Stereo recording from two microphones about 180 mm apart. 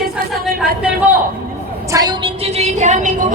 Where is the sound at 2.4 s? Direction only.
40° right (ahead or behind).